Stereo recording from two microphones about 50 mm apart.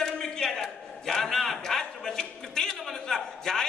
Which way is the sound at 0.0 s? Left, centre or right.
Centre.